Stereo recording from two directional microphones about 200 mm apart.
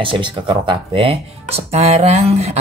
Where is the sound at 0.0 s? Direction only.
25° right (ahead or behind).